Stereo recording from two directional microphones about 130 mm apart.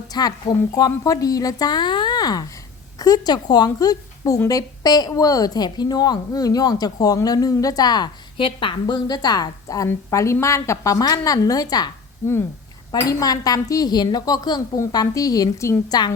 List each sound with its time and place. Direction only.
0.1 s a woman's voice: 30° left (ahead or behind)